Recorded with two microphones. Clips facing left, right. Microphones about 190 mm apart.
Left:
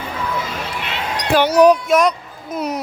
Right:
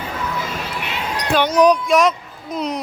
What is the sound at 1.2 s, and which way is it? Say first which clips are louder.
A woman's voice: left 3 dB; 10° left (ahead or behind).